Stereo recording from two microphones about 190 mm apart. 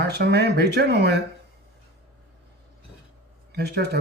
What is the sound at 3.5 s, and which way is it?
Speech, 60° right (ahead or behind).